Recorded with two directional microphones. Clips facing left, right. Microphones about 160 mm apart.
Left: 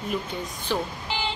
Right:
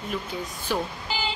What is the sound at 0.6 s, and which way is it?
Music, 5° right (ahead or behind).